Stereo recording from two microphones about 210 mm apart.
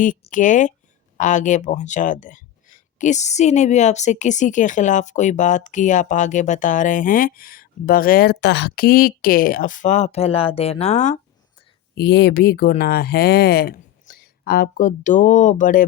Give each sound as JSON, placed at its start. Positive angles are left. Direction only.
{"t": 0.0, "sound": "speech", "side_deg": 40}
{"t": 11.9, "sound": "speech", "side_deg": 50}